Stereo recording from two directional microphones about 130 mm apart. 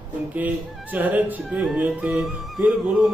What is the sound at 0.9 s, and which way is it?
Speech, 10° right (ahead or behind).